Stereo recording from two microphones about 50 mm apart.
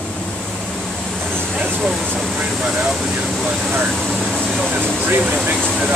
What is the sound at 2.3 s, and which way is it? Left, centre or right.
Speech, right.